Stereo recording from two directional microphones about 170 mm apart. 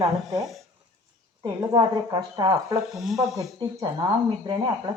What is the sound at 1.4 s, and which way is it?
A woman's voice, 20° right (ahead or behind).